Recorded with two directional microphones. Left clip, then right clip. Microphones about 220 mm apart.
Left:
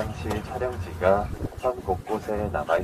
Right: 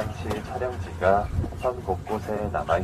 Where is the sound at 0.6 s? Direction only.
10° left (ahead or behind).